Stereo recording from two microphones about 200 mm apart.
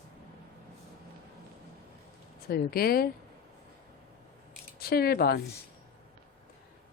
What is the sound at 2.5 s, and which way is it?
Speech, 50° left (ahead or behind).